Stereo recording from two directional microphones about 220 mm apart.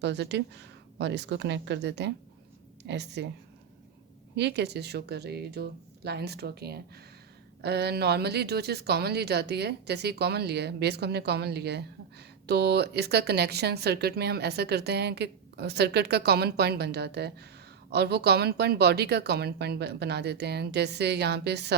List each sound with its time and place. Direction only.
0.0 s speech: 50° right (ahead or behind)
4.4 s speech: 50° right (ahead or behind)